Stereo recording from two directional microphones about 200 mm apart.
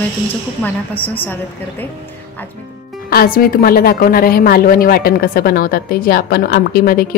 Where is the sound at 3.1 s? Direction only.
50° left (ahead or behind).